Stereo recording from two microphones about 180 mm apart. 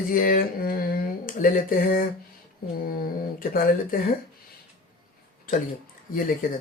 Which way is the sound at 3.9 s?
50° left (ahead or behind).